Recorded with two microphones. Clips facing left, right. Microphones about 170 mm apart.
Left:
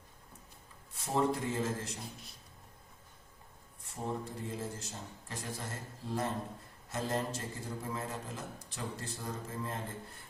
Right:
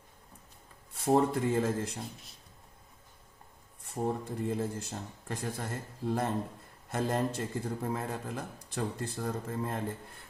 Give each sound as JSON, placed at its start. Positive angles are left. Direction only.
{"t": 0.9, "sound": "a man's voice", "side_deg": -55}
{"t": 4.0, "sound": "a man's voice", "side_deg": -60}